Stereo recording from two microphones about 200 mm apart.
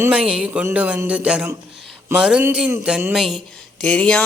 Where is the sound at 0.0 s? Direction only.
5° right (ahead or behind).